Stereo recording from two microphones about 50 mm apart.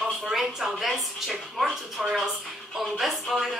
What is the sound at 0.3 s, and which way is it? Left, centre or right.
A woman's voice, centre.